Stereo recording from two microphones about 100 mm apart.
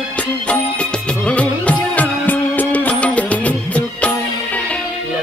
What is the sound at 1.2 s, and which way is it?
Music, 15° left (ahead or behind).